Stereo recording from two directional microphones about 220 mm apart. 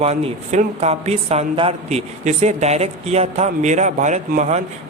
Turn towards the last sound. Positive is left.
turn(degrees=-30)  # may be behind; listen again after turning